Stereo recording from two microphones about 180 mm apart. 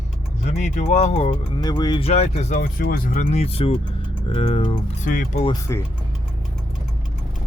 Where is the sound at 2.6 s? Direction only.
55° left (ahead or behind); by 4.7 s 30° left (ahead or behind).